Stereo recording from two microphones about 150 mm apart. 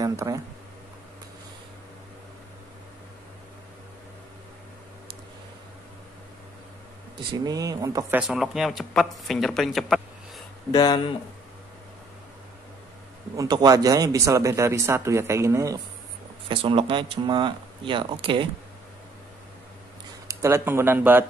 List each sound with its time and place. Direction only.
0.0 s speech: 25° right (ahead or behind)
7.2 s speech: 30° right (ahead or behind)
8.1 s speech: 5° right (ahead or behind)
10.7 s speech: 30° left (ahead or behind)
13.4 s speech: 25° right (ahead or behind)
16.4 s speech: 35° right (ahead or behind)
20.2 s speech: 20° right (ahead or behind)